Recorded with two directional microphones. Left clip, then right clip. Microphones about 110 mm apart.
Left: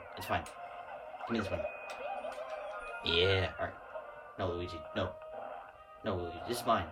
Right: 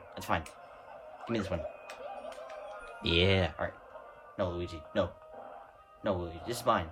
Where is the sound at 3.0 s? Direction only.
60° right (ahead or behind).